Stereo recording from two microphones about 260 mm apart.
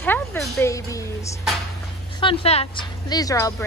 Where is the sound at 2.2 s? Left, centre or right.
Left.